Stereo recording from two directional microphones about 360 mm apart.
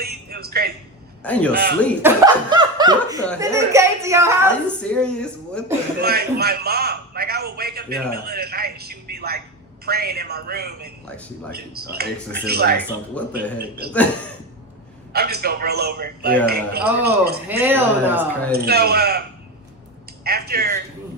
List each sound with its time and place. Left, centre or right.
0.0 s a sound: right
1.2 s a man's voice: centre
6.0 s a man's voice: right
15.1 s a man's voice: right
17.5 s speech: centre
18.5 s a man's voice: right
20.2 s a man's voice: right